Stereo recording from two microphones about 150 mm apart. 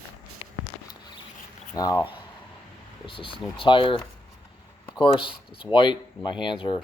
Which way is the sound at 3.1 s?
35° left (ahead or behind).